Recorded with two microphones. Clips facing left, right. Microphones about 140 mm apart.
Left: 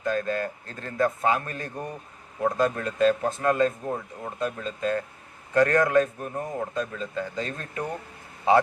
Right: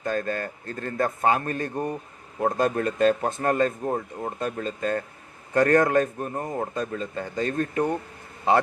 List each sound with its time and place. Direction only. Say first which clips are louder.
0.0 s speech: left 1 dB; 45° right (ahead or behind)